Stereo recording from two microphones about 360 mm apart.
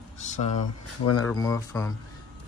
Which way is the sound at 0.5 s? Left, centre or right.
Left.